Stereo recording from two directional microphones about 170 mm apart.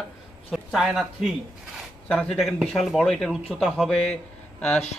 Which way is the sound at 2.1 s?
5° left (ahead or behind).